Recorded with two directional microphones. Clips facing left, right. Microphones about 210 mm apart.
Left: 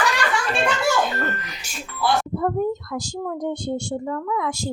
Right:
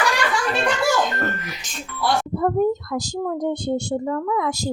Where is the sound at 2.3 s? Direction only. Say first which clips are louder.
Right 3 dB; 40° right (ahead or behind).